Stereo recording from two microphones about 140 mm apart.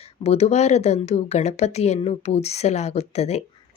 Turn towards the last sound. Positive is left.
turn(degrees=50)  # may be behind; listen again after turning